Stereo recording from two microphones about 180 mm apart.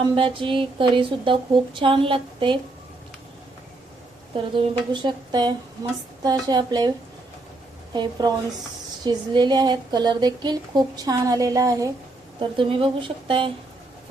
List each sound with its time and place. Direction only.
0.0 s speech: 30° right (ahead or behind)
4.9 s speech: 25° right (ahead or behind)
7.9 s speech: 20° right (ahead or behind)